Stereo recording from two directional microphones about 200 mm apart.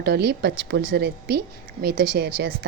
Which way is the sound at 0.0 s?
55° right (ahead or behind).